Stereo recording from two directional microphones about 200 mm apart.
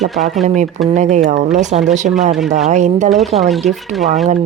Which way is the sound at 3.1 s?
Centre (ahead or behind).